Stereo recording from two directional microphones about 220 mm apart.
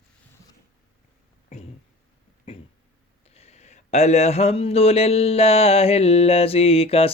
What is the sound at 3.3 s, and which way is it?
Speech, 30° left (ahead or behind).